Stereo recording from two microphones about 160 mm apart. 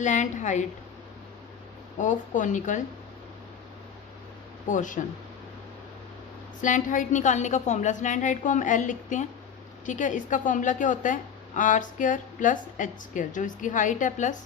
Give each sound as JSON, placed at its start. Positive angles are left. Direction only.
{"t": 0.0, "sound": "a woman's voice", "side_deg": 50}
{"t": 2.0, "sound": "a woman's voice", "side_deg": 50}
{"t": 4.7, "sound": "a woman's voice", "side_deg": 55}
{"t": 6.6, "sound": "a woman's voice", "side_deg": 55}